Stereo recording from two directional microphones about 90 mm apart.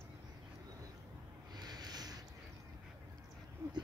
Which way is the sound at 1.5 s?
50° right (ahead or behind).